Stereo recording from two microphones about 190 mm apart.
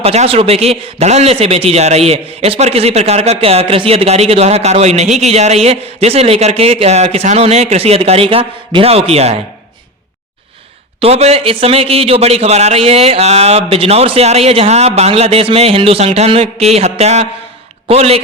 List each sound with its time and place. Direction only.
0.0 s a man's voice: 35° right (ahead or behind)
11.0 s a man's voice: 35° right (ahead or behind)